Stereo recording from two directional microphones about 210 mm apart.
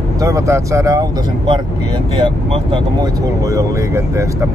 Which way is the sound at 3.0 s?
15° right (ahead or behind).